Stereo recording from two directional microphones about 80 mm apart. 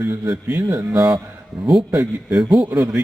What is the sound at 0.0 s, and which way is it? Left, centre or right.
Speech, right.